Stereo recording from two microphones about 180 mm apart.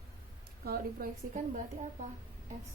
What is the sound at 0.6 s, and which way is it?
Speech, 55° right (ahead or behind).